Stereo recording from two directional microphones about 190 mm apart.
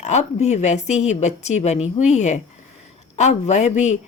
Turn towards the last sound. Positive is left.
turn(degrees=40)  # may be behind; listen again after turning